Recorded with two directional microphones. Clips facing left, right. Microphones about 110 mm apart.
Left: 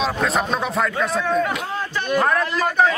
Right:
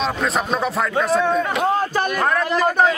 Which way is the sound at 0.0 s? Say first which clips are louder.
Even; centre (ahead or behind).